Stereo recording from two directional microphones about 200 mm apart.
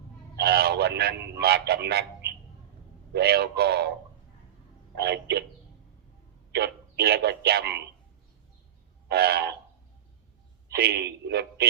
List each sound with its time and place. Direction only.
0.3 s speech: 55° right (ahead or behind)
4.9 s speech: 55° right (ahead or behind)
6.5 s a man's voice: 55° right (ahead or behind)
9.0 s speech: 50° right (ahead or behind)
10.8 s speech: 55° right (ahead or behind)